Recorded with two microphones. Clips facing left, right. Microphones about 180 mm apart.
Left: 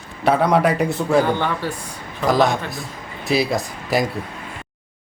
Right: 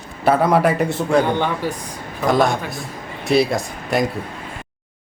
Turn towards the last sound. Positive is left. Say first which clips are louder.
# even
turn(degrees=0)  # may be behind; listen again after turning